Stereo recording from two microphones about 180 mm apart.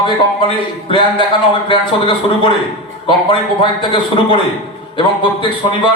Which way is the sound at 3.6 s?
25° left (ahead or behind).